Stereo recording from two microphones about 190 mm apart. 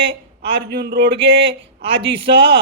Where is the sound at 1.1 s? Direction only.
30° right (ahead or behind).